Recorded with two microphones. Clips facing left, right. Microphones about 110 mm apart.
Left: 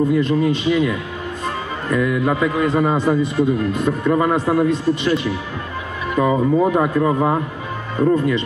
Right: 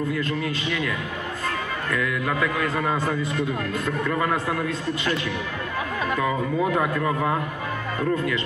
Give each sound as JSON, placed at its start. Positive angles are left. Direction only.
{"t": 0.2, "sound": "a man's voice", "side_deg": 15}